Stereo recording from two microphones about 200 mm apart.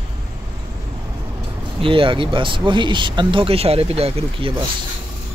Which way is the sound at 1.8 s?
25° right (ahead or behind).